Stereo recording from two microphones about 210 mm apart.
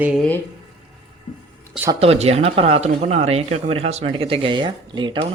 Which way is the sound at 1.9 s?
30° right (ahead or behind).